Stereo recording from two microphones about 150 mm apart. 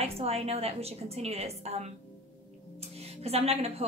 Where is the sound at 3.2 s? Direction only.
45° right (ahead or behind).